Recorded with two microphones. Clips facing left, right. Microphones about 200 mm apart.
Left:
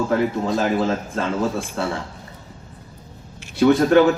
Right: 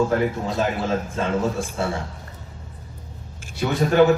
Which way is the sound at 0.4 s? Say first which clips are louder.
Left 4 dB; 70° left (ahead or behind).